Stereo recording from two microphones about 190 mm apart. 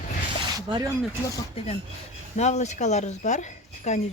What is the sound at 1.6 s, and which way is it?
Speech, 30° left (ahead or behind).